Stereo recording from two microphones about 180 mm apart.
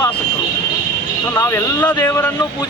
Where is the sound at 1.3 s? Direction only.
15° left (ahead or behind).